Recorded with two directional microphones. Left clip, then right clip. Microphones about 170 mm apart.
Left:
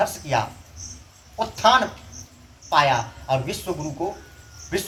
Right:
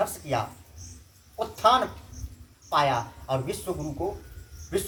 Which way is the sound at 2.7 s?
20° right (ahead or behind).